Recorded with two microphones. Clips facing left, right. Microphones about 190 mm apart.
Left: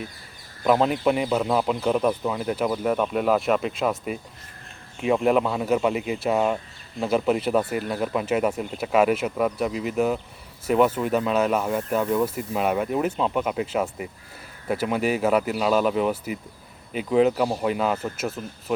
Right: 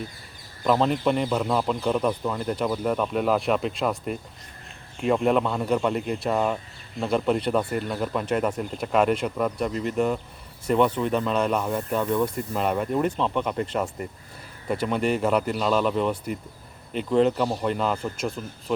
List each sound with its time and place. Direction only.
0.6 s speech: 5° left (ahead or behind)